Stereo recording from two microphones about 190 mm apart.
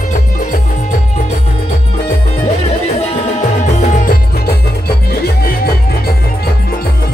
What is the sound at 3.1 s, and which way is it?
Music, 35° left (ahead or behind).